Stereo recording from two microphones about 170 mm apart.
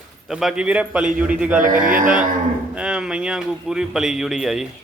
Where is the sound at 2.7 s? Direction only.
5° right (ahead or behind).